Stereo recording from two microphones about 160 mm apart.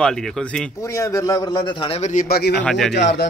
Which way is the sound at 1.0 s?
20° left (ahead or behind).